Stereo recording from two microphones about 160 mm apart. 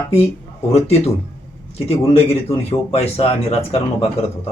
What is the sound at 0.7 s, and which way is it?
Speech, 40° left (ahead or behind).